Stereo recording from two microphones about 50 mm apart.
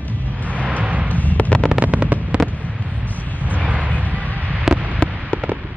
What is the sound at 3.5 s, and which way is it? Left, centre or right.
Vehicle, right.